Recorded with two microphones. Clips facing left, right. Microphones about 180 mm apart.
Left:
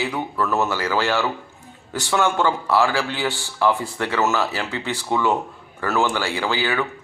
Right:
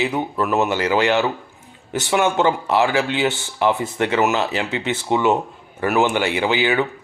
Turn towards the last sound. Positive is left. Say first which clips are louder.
# right 4 dB
turn(degrees=-20)  # may be behind; listen again after turning